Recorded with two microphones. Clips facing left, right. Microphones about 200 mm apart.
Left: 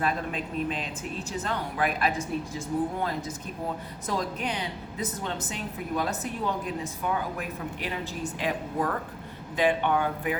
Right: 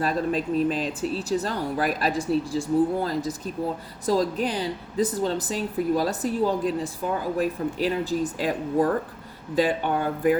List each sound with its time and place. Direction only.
0.0 s a woman's voice: 35° right (ahead or behind)